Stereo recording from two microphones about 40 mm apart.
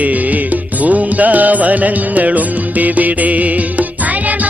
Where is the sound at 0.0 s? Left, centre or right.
Right.